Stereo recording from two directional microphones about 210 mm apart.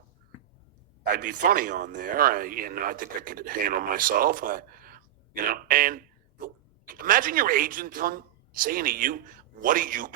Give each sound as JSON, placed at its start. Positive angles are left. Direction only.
{"t": 1.0, "sound": "speech", "side_deg": -40}